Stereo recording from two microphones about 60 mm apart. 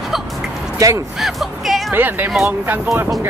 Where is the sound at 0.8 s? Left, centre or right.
Right.